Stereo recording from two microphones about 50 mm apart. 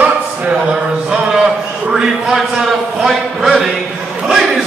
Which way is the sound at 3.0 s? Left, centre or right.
Centre.